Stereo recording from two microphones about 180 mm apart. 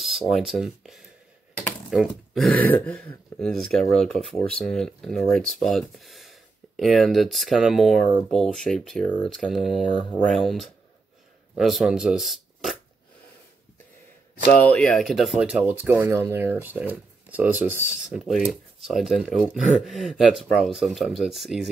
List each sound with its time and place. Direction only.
0.0 s speech: centre (ahead or behind)
14.6 s speech: 5° left (ahead or behind)